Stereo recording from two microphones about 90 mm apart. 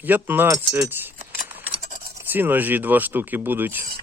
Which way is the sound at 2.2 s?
20° right (ahead or behind).